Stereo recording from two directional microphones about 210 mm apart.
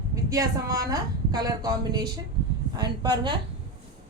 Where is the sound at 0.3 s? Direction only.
15° right (ahead or behind).